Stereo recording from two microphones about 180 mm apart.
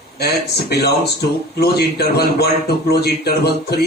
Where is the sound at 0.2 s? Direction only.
65° left (ahead or behind).